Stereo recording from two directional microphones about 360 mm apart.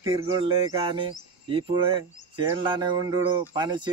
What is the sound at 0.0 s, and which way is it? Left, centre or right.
Speech, centre.